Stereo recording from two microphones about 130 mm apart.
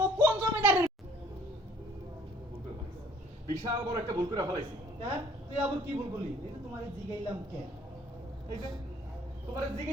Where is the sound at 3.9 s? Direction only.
35° right (ahead or behind).